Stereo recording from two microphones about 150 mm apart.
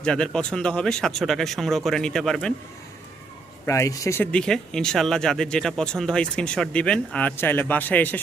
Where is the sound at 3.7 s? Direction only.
20° left (ahead or behind).